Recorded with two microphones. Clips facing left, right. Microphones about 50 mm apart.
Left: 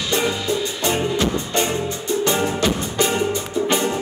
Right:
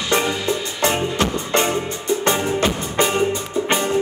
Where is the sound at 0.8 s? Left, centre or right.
Right.